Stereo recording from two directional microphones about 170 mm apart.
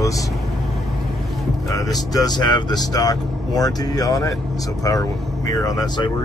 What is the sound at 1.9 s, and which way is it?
Speech, 25° left (ahead or behind).